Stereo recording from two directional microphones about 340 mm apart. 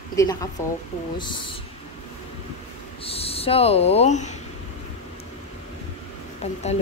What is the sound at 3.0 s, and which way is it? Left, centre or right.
Speech, centre.